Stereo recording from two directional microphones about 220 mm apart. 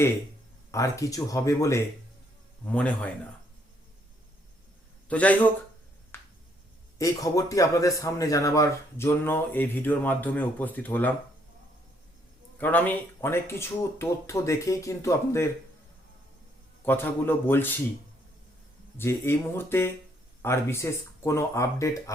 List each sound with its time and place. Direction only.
0.7 s a man's voice: 15° left (ahead or behind)
5.0 s a man's voice: 5° left (ahead or behind)
6.1 s a sound: 10° left (ahead or behind)
7.0 s speech: 15° left (ahead or behind)
12.5 s speech: 10° left (ahead or behind)
16.8 s speech: 10° left (ahead or behind)
18.9 s speech: 10° left (ahead or behind)